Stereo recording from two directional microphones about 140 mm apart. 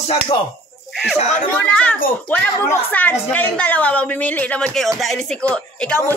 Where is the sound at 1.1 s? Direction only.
55° left (ahead or behind).